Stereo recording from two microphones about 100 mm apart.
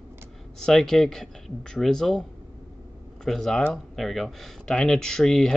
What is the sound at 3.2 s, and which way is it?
Speech, 5° left (ahead or behind).